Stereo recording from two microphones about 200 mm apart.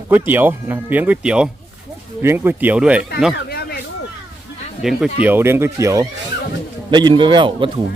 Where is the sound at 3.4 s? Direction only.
50° left (ahead or behind).